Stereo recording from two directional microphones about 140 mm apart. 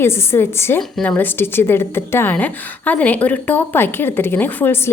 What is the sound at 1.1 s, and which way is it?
A woman's voice, 15° left (ahead or behind).